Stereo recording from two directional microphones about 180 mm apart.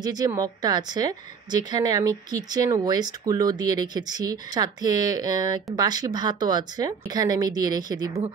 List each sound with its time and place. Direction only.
0.0 s speech: 20° right (ahead or behind)